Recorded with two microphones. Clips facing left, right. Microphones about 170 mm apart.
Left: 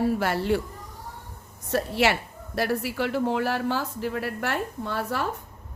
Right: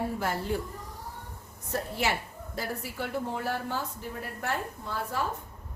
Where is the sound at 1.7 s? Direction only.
85° left.